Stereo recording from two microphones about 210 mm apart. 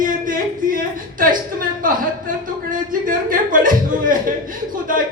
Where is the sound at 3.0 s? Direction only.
40° right (ahead or behind).